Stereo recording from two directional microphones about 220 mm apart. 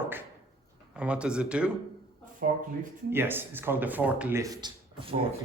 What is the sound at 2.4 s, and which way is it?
Speech, 40° right (ahead or behind).